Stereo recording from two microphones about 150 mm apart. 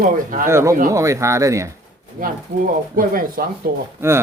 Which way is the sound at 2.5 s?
80° right.